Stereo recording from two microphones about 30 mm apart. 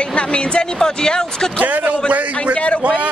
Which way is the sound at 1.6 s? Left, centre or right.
Right.